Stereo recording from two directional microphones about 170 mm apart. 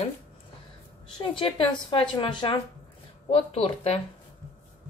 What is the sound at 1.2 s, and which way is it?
A woman's voice, 30° left (ahead or behind).